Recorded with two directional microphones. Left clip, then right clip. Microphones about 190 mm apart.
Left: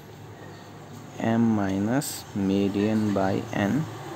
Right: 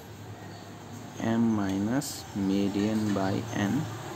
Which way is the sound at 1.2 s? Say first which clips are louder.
Left 4 dB; 25° left (ahead or behind).